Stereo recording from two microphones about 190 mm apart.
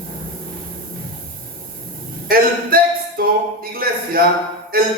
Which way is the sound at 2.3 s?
50° right (ahead or behind).